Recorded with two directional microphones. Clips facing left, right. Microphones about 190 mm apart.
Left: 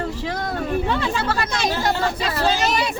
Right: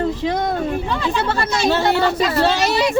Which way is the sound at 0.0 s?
20° right (ahead or behind).